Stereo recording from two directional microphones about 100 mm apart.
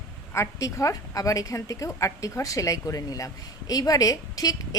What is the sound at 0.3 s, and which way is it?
A woman's voice, 30° left (ahead or behind).